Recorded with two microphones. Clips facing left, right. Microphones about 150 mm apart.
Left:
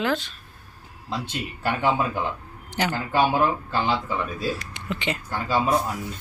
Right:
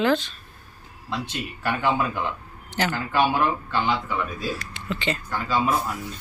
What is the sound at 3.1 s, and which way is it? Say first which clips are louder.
Speech: left 1 dB; 35° left (ahead or behind).